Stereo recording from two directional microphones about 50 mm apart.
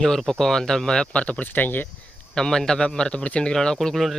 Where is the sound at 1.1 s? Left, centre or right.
Left.